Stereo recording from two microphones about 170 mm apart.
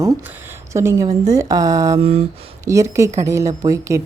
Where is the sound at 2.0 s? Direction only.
35° right (ahead or behind).